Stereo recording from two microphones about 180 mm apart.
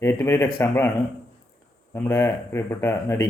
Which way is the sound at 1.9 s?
15° left (ahead or behind).